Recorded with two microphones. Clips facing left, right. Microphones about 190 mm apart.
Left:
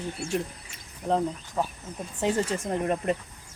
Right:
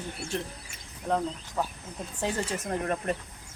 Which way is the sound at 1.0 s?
20° left (ahead or behind).